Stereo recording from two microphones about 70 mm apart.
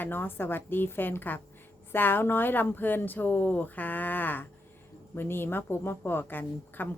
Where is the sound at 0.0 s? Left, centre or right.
Left.